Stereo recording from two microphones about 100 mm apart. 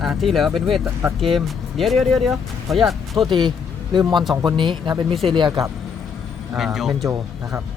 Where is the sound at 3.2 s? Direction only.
50° right (ahead or behind).